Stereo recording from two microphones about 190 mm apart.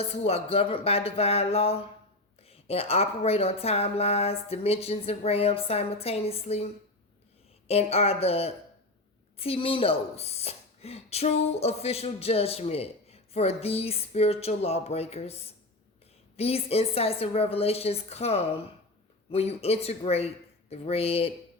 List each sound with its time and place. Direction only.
0.0 s speech: 30° left (ahead or behind)
7.7 s speech: 35° left (ahead or behind)
16.4 s speech: 30° left (ahead or behind)